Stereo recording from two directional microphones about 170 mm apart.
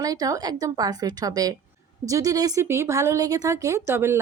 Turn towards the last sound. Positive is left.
turn(degrees=-15)  # may be behind; listen again after turning